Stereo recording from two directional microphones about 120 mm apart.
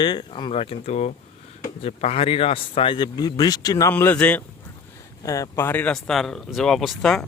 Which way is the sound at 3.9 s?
15° left (ahead or behind).